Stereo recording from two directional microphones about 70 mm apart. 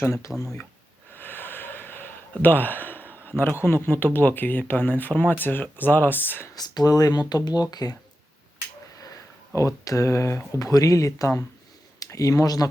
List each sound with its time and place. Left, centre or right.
0.3 s speech: centre
1.1 s a sound: left
4.0 s speech: left
6.6 s speech: left
9.6 s speech: left
10.6 s speech: left